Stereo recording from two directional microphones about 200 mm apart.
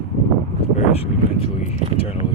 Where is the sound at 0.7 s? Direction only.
30° left (ahead or behind).